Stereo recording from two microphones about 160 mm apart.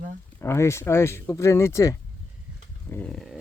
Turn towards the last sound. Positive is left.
turn(degrees=0)  # may be behind; listen again after turning